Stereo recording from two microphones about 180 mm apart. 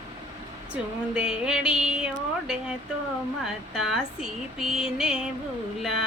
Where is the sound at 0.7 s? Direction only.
5° right (ahead or behind).